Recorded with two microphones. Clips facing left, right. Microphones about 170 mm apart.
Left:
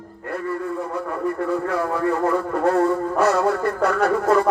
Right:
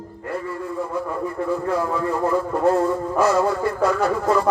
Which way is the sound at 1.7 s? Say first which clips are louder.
Left 1 dB; 60° left (ahead or behind).